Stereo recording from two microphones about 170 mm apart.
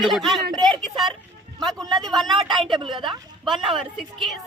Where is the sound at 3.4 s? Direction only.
Centre (ahead or behind).